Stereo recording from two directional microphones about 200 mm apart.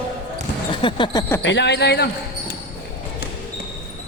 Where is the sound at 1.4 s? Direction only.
60° left (ahead or behind).